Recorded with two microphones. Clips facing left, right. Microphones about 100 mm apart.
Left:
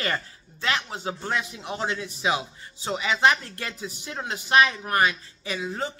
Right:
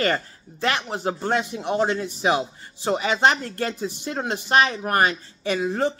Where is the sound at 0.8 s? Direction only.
45° right (ahead or behind).